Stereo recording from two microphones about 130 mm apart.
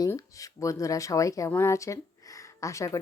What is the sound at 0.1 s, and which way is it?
A woman's voice, 25° left (ahead or behind).